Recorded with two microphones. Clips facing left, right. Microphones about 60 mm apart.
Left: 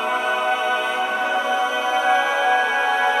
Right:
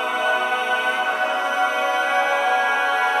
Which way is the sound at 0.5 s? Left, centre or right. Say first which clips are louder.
Even; right.